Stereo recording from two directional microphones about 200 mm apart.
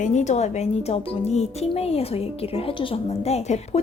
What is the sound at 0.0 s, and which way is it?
Speech, 35° left (ahead or behind).